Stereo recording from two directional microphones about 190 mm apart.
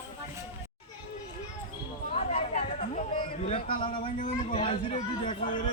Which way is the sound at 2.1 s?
35° left (ahead or behind).